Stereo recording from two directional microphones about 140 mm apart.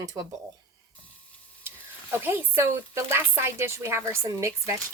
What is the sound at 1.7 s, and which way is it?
Speech, 15° right (ahead or behind).